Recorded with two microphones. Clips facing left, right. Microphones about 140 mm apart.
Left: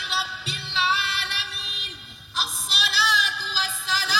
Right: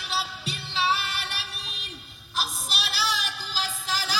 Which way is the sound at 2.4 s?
10° right (ahead or behind).